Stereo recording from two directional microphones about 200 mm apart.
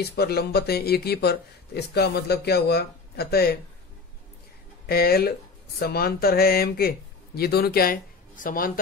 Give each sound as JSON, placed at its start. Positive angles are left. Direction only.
{"t": 0.0, "sound": "speech", "side_deg": 55}
{"t": 4.8, "sound": "speech", "side_deg": 50}